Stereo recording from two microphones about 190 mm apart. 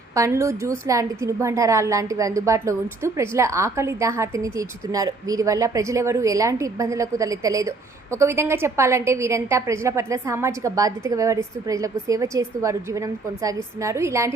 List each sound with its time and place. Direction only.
0.1 s a woman's voice: 15° right (ahead or behind)